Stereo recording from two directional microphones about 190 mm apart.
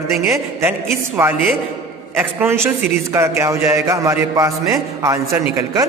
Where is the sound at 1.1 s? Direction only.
10° right (ahead or behind).